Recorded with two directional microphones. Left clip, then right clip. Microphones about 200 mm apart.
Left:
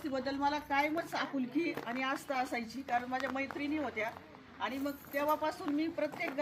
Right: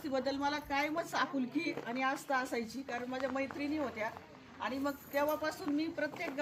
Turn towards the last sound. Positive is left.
turn(degrees=-10)  # may be behind; listen again after turning